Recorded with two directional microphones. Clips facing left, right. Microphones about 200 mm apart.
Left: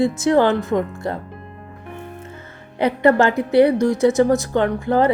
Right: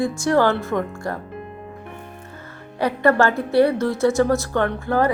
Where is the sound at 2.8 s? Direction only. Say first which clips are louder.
Left 2 dB; 20° left (ahead or behind).